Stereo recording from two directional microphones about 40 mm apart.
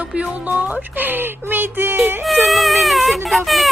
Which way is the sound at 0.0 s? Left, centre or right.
Right.